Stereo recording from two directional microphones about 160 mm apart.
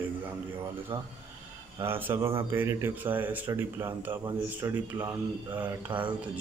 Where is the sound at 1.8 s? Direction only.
15° right (ahead or behind).